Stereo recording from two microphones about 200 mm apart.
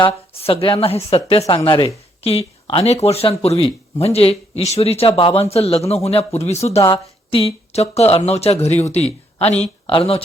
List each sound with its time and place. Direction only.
0.0 s speech: 30° left (ahead or behind)